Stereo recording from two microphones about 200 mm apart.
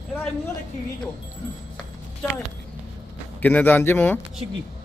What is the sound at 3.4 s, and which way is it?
Speech, 10° left (ahead or behind).